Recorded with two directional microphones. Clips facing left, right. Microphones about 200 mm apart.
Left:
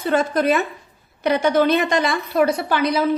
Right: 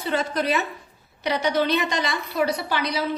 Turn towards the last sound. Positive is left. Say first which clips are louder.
# left 6 dB
turn(degrees=50)  # may be behind; listen again after turning